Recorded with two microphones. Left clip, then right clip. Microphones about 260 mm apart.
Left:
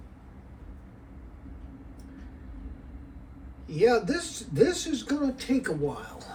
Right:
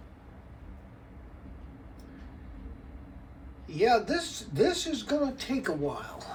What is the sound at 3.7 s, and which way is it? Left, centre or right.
Speech, right.